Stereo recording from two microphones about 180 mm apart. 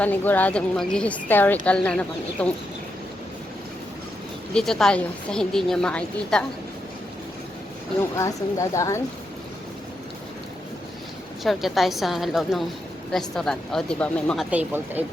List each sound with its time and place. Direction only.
0.0 s speech: 10° left (ahead or behind)
4.5 s a woman's voice: 5° left (ahead or behind)
8.1 s speech: 15° left (ahead or behind)
11.4 s a woman's voice: centre (ahead or behind)
14.5 s speech: 10° right (ahead or behind)